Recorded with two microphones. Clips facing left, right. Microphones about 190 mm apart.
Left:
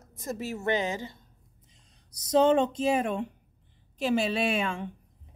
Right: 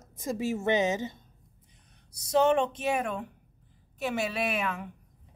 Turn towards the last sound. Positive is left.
turn(degrees=30)  # may be behind; listen again after turning